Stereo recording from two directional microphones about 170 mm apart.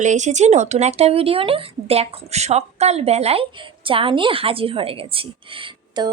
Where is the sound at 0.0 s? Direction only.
45° right (ahead or behind).